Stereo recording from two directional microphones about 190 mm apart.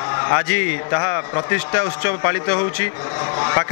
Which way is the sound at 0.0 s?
25° left (ahead or behind).